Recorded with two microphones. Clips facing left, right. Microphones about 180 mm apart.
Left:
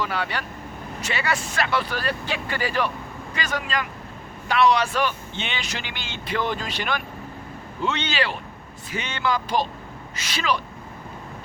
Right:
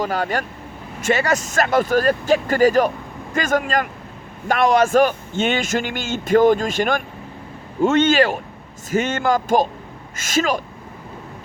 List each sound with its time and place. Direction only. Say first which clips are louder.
0.0 s speech: right 6 dB; 45° right (ahead or behind)